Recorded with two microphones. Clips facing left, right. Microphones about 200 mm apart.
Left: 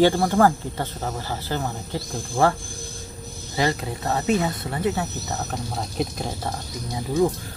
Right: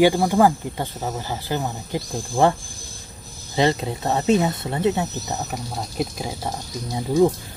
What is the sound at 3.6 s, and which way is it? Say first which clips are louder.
Speech: right 4 dB; 25° right (ahead or behind).